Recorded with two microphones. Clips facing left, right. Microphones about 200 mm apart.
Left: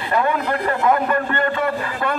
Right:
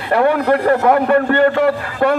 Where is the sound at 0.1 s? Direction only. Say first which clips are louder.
Right 7 dB; 65° right (ahead or behind).